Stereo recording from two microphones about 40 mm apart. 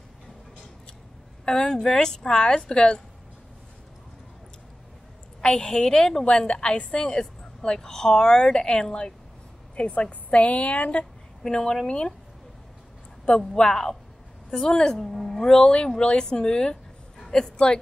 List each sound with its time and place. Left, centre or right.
1.4 s a woman's voice: centre
5.4 s a woman's voice: left
6.2 s a woman's voice: left
11.4 s a woman's voice: centre
13.4 s a woman's voice: centre